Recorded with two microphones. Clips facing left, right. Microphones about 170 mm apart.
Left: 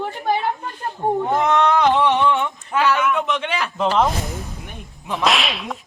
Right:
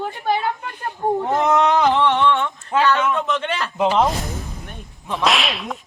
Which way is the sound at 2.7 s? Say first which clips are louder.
Right 2 dB; 25° right (ahead or behind).